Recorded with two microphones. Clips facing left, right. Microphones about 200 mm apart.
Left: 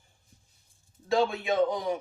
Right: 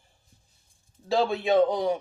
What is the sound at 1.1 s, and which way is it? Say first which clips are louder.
Speech: right 3 dB; 30° right (ahead or behind).